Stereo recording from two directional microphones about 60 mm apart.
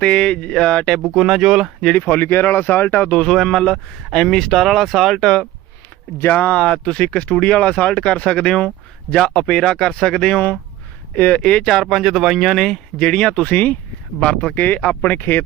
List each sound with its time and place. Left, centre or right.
0.0 s speech: centre
1.1 s speech: centre
2.0 s speech: left
3.2 s speech: centre
6.3 s speech: left
11.7 s speech: centre
14.6 s speech: left